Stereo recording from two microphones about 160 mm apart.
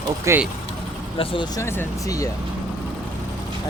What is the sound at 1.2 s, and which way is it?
Speech, 35° left (ahead or behind).